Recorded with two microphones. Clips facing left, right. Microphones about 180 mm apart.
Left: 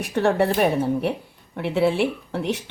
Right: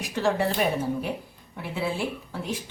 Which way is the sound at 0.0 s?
60° left (ahead or behind).